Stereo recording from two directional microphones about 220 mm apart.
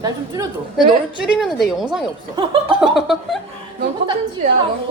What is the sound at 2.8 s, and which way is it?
Speech, centre (ahead or behind).